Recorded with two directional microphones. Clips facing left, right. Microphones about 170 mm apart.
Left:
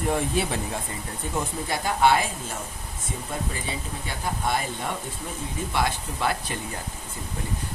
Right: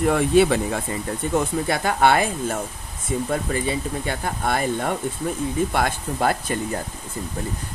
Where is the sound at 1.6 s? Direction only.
65° right (ahead or behind); by 6.6 s 45° right (ahead or behind).